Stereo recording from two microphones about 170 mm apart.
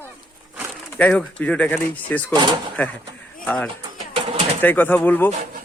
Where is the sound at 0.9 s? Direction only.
5° left (ahead or behind).